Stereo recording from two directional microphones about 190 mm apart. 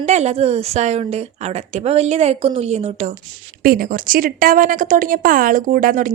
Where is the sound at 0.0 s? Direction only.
35° right (ahead or behind).